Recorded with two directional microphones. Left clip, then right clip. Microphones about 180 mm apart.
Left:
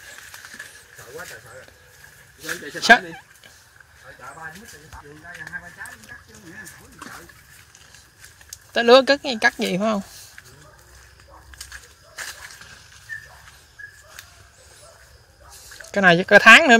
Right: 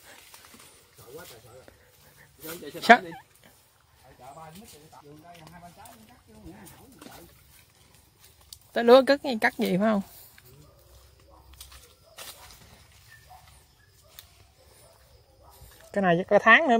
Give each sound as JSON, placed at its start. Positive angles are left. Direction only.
{"t": 2.9, "sound": "a sound", "side_deg": -20}
{"t": 8.7, "sound": "speech", "side_deg": -20}
{"t": 15.9, "sound": "speech", "side_deg": 0}